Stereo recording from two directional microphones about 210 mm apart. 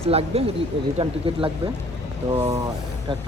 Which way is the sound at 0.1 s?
30° right (ahead or behind).